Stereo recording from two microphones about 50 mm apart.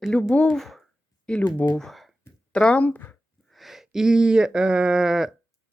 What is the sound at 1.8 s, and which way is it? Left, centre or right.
Speech, centre.